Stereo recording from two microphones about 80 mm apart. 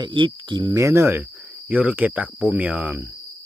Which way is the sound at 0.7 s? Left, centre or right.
Right.